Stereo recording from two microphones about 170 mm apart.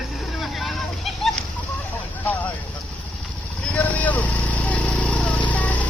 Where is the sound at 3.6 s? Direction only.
10° left (ahead or behind).